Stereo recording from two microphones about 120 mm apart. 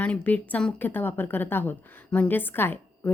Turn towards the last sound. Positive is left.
turn(degrees=20)  # may be behind; listen again after turning